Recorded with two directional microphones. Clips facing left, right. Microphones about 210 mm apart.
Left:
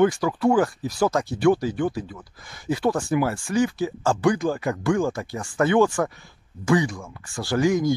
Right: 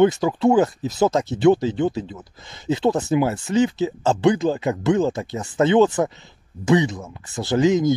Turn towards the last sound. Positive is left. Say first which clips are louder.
# right 3 dB
turn(degrees=-20)  # may be behind; listen again after turning